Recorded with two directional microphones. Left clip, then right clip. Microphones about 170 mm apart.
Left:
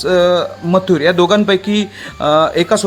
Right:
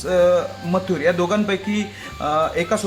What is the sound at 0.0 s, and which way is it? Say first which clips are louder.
Speech: left 4 dB; 60° left (ahead or behind).